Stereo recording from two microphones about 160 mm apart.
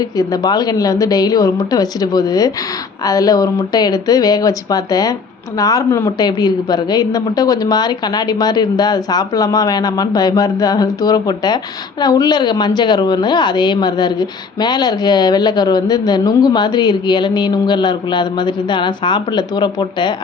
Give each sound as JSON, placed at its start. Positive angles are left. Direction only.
{"t": 0.0, "sound": "a woman's voice", "side_deg": 25}